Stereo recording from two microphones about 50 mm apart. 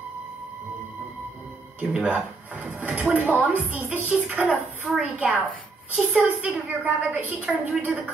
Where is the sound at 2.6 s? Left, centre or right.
Right.